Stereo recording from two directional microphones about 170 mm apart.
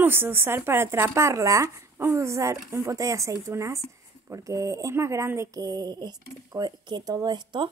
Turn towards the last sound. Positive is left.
turn(degrees=-25)  # may be behind; listen again after turning